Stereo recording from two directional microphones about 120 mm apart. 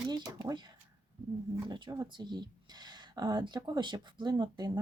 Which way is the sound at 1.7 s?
40° right (ahead or behind).